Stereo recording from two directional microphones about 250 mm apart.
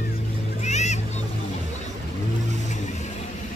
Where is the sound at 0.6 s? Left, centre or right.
Left.